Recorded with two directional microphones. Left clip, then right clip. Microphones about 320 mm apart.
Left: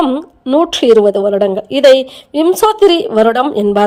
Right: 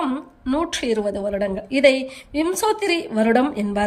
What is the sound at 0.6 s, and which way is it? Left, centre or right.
Speech, centre.